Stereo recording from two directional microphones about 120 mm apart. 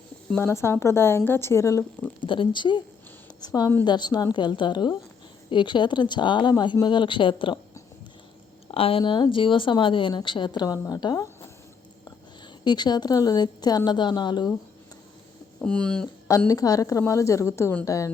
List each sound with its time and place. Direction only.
0.3 s a woman's voice: 20° left (ahead or behind)
2.2 s speech: 45° left (ahead or behind)
8.6 s speech: 55° left (ahead or behind); by 11.3 s 35° left (ahead or behind)
12.6 s speech: 35° left (ahead or behind)
15.6 s speech: 10° left (ahead or behind)
16.5 s a woman's voice: 30° left (ahead or behind)